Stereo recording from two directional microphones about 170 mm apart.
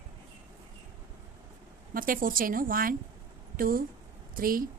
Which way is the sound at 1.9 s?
55° right (ahead or behind).